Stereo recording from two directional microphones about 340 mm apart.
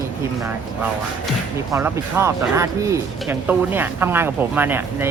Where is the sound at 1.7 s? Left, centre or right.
Centre.